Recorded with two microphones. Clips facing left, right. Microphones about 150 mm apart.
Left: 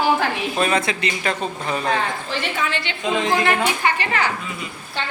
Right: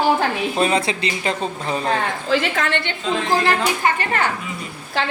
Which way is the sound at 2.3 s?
90° right.